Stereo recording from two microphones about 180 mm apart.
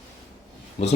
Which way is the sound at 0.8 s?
35° left (ahead or behind).